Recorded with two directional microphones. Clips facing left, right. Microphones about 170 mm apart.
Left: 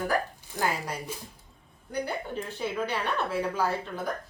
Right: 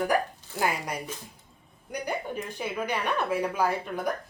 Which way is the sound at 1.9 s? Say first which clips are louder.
Even; 15° right (ahead or behind).